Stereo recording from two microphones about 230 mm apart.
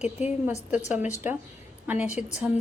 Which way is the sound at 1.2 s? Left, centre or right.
Centre.